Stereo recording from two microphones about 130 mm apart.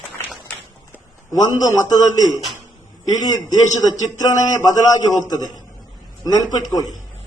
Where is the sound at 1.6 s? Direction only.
30° left (ahead or behind).